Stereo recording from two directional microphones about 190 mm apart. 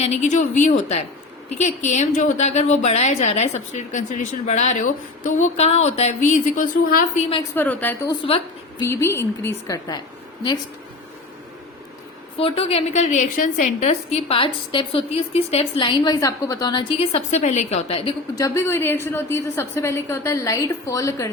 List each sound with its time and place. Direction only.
0.0 s a woman's voice: 35° left (ahead or behind)
7.5 s a woman's voice: 10° left (ahead or behind)
8.0 s a woman's voice: 25° left (ahead or behind)
8.8 s a woman's voice: 15° left (ahead or behind)
12.4 s a woman's voice: 30° left (ahead or behind)
18.4 s a woman's voice: 15° left (ahead or behind)